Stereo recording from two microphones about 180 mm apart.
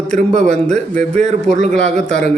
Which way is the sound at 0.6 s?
5° left (ahead or behind).